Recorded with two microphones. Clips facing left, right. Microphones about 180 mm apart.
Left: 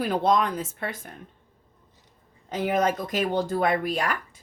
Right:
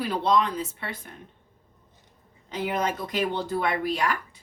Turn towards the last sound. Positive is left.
turn(degrees=45)  # may be behind; listen again after turning